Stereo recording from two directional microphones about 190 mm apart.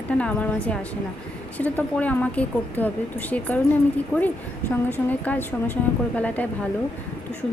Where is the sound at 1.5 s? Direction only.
10° left (ahead or behind).